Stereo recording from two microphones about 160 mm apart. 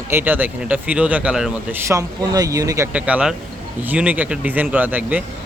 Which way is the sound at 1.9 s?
20° right (ahead or behind).